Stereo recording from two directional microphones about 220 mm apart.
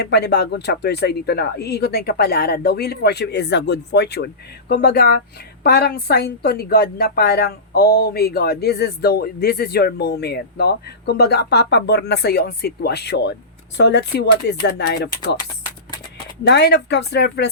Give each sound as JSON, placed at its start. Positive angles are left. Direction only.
{"t": 0.0, "sound": "a woman's voice", "side_deg": 50}
{"t": 16.4, "sound": "a woman's voice", "side_deg": 50}